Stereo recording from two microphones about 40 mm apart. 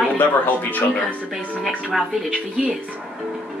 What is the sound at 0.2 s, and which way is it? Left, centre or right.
Speech, left.